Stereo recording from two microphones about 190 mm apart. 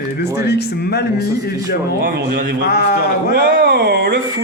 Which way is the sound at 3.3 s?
50° right (ahead or behind).